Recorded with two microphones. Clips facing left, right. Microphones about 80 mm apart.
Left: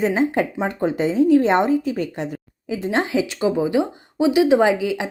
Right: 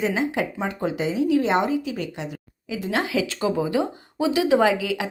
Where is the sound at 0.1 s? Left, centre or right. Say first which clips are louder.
Left 5 dB; left.